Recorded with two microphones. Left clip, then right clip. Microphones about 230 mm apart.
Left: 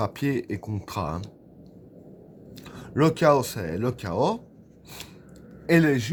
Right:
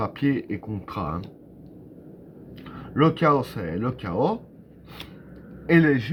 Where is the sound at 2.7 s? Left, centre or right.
Left.